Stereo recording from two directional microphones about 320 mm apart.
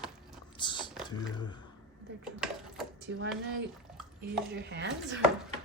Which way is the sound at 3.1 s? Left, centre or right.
Right.